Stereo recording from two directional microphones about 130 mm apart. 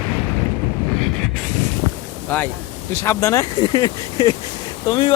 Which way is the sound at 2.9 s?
20° left (ahead or behind).